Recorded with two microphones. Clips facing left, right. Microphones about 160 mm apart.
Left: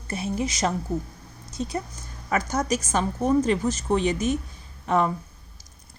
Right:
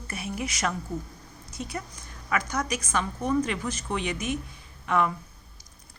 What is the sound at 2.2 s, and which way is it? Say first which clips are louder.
A woman's voice: left 4 dB; 30° left (ahead or behind).